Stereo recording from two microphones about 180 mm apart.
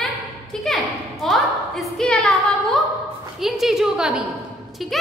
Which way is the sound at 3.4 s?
Centre (ahead or behind).